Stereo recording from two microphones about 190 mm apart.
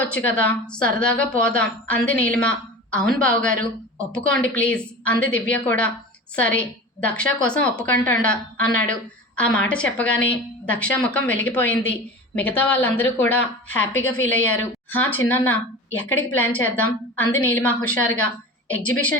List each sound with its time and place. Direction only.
0.1 s a woman's voice: 10° left (ahead or behind)
13.9 s a woman's voice: 90° left
14.3 s a woman's voice: 10° left (ahead or behind)